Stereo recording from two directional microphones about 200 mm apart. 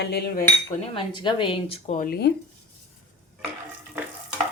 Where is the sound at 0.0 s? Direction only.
55° left (ahead or behind).